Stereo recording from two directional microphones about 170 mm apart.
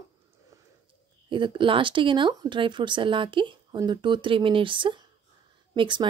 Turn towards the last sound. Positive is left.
turn(degrees=-30)  # may be behind; listen again after turning